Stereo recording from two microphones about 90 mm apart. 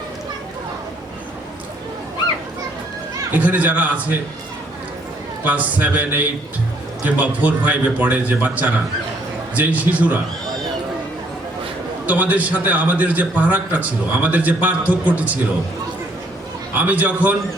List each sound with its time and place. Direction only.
3.3 s a man's voice: 20° right (ahead or behind)
5.4 s a man's voice: 15° right (ahead or behind)
12.0 s a man's voice: 20° right (ahead or behind)
16.7 s a man's voice: 20° right (ahead or behind)